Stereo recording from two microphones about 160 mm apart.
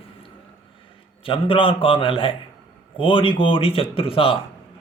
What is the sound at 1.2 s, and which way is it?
A man's voice, 35° left (ahead or behind).